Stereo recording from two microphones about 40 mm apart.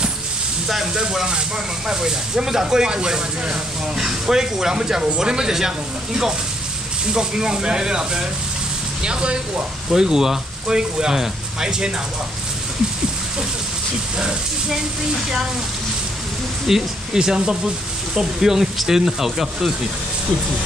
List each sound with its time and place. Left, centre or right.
0.7 s speech: centre
7.2 s speech: centre
14.1 s speech: right
16.6 s speech: centre